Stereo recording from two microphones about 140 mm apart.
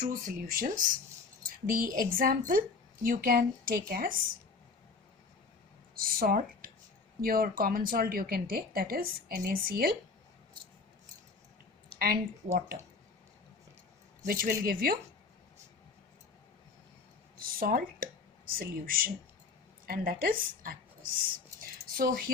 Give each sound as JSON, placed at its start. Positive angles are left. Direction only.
{"t": 0.0, "sound": "speech", "side_deg": -85}
{"t": 1.6, "sound": "speech", "side_deg": -90}
{"t": 5.9, "sound": "speech", "side_deg": -90}
{"t": 11.9, "sound": "a woman's voice", "side_deg": -90}
{"t": 14.3, "sound": "speech", "side_deg": -90}
{"t": 17.4, "sound": "speech", "side_deg": -90}